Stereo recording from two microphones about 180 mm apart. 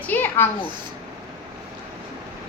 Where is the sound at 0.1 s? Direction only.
10° left (ahead or behind).